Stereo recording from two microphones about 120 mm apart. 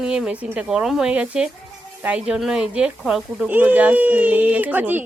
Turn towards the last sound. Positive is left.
turn(degrees=-15)  # may be behind; listen again after turning